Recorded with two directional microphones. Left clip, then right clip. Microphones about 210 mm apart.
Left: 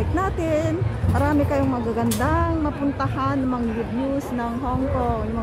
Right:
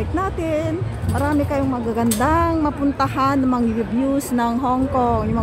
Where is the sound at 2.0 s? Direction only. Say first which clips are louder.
Right 7 dB; 25° right (ahead or behind).